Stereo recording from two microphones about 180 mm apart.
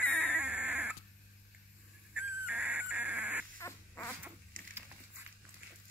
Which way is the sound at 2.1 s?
5° right (ahead or behind).